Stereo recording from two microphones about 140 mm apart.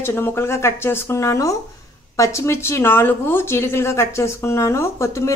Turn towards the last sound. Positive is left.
turn(degrees=20)  # may be behind; listen again after turning